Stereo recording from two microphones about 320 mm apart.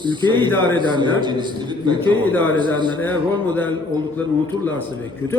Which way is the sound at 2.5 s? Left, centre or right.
Centre.